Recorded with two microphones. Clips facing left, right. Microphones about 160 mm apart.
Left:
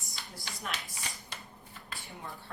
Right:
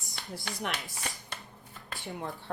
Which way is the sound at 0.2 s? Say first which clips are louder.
Right 7 dB; 65° right (ahead or behind).